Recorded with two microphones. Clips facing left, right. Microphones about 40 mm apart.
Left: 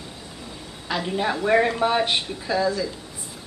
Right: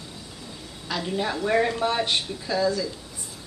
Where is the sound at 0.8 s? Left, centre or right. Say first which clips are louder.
Left 3 dB; centre.